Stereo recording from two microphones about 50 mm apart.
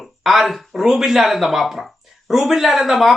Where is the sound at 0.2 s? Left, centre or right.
Centre.